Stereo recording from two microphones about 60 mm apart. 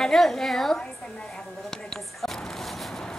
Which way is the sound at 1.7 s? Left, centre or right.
Centre.